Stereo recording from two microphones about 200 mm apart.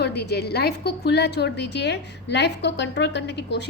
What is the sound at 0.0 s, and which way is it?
A woman's voice, 55° left (ahead or behind).